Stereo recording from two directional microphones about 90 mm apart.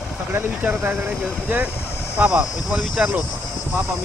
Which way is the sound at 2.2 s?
10° right (ahead or behind).